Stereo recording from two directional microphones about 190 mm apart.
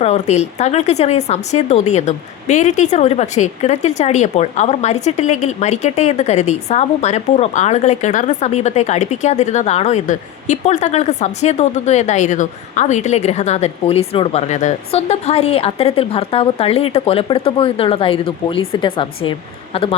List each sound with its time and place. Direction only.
0.0 s a woman's voice: 35° left (ahead or behind)